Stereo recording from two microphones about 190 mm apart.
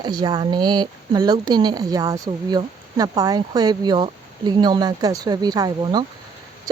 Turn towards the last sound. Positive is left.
turn(degrees=-20)  # may be behind; listen again after turning